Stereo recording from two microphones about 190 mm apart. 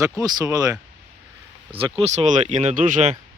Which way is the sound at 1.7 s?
30° right (ahead or behind).